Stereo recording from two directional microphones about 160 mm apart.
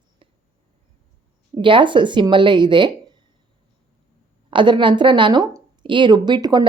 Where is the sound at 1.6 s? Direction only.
30° right (ahead or behind).